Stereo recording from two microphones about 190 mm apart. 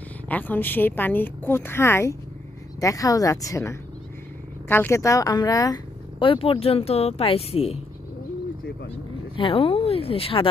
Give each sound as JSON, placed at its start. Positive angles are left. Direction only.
{"t": 0.3, "sound": "a woman's voice", "side_deg": 10}
{"t": 9.4, "sound": "speech", "side_deg": 30}